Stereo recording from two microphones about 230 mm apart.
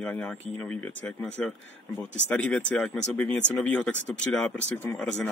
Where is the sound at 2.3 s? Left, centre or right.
Centre.